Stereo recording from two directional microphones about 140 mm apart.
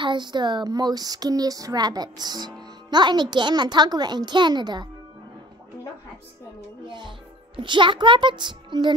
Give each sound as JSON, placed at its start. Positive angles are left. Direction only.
{"t": 0.0, "sound": "speech", "side_deg": -35}
{"t": 6.9, "sound": "speech", "side_deg": -35}